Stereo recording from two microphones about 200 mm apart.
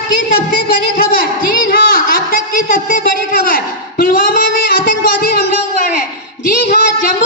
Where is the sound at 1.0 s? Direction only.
45° left (ahead or behind).